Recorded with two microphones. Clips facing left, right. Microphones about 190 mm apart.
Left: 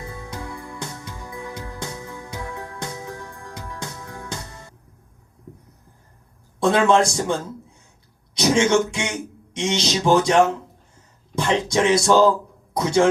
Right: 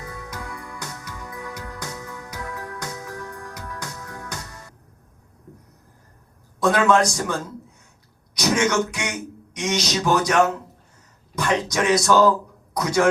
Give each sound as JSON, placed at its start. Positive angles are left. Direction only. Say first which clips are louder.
{"t": 0.0, "sound": "music", "louder": "left 2 dB", "side_deg": 25}
{"t": 6.6, "sound": "speech", "louder": "left 1 dB", "side_deg": 25}